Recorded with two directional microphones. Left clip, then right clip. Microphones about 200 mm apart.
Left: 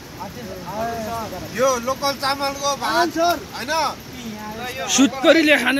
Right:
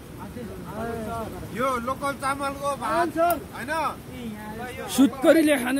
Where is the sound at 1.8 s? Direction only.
20° left (ahead or behind).